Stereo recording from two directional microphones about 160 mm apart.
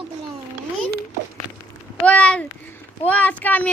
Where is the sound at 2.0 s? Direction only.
10° left (ahead or behind).